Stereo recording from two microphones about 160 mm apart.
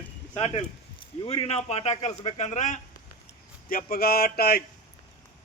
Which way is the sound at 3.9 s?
70° left (ahead or behind).